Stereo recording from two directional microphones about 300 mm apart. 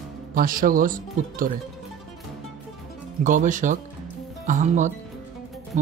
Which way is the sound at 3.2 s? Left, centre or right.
Right.